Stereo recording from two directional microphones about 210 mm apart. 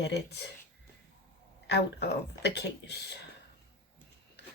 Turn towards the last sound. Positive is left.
turn(degrees=55)  # may be behind; listen again after turning